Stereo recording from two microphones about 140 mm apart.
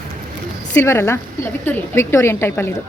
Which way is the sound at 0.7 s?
15° left (ahead or behind).